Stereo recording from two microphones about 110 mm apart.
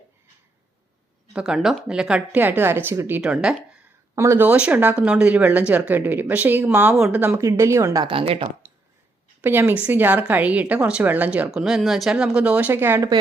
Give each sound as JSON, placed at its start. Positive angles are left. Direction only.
{"t": 1.3, "sound": "speech", "side_deg": -5}
{"t": 3.2, "sound": "speech", "side_deg": -10}
{"t": 4.1, "sound": "speech", "side_deg": -25}
{"t": 4.4, "sound": "speech", "side_deg": -10}
{"t": 8.1, "sound": "speech", "side_deg": -55}
{"t": 9.4, "sound": "speech", "side_deg": -20}
{"t": 11.5, "sound": "speech", "side_deg": -5}